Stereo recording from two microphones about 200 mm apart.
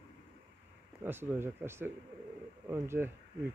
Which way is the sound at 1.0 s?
10° right (ahead or behind).